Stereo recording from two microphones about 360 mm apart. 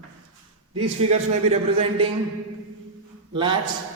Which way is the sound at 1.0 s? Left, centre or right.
Centre.